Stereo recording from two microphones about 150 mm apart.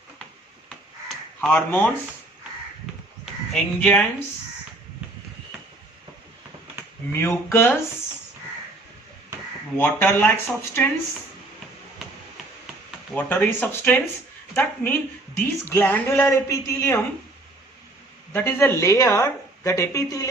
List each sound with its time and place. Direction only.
1.0 s crow: 10° left (ahead or behind)
3.5 s speech: 10° left (ahead or behind)
7.1 s speech: 15° left (ahead or behind)
9.7 s speech: 15° left (ahead or behind)
13.1 s speech: 10° left (ahead or behind)
18.3 s speech: 15° left (ahead or behind)